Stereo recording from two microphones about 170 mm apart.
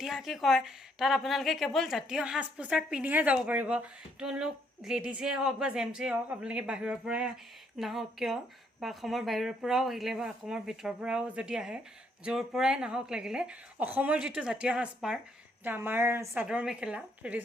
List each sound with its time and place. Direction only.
0.0 s a woman's voice: centre (ahead or behind)